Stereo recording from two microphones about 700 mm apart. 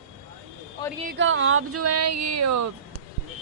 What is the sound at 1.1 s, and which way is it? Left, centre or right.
Speech, centre.